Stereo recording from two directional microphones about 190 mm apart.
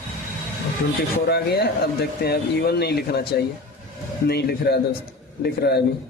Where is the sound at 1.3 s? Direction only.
55° left (ahead or behind).